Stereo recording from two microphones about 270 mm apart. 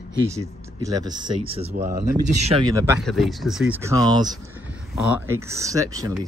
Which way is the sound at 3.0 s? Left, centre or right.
Centre.